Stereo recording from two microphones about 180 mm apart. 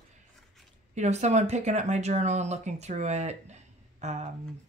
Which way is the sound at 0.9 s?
40° right (ahead or behind).